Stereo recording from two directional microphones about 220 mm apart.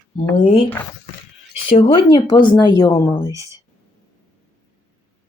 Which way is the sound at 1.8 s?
25° left (ahead or behind).